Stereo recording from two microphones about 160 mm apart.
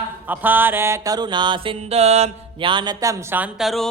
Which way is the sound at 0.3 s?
10° right (ahead or behind).